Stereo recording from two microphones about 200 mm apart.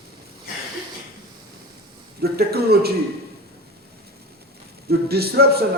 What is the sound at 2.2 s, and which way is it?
Speech, 50° right (ahead or behind).